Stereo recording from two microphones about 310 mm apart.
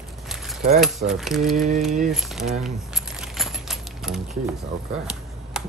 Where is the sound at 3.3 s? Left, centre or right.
Centre.